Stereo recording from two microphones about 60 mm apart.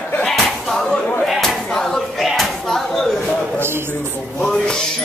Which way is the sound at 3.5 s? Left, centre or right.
Right.